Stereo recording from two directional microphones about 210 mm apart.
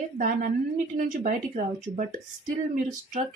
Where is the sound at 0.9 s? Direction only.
40° right (ahead or behind).